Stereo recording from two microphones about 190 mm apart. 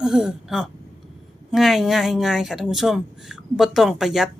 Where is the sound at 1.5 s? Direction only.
Centre (ahead or behind).